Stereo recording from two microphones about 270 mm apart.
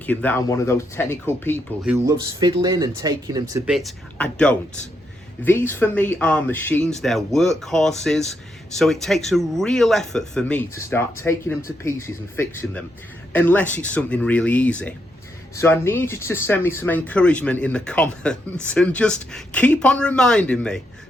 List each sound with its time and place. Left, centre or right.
0.0 s speech: centre
1.8 s speech: centre
2.4 s speech: centre
3.7 s speech: centre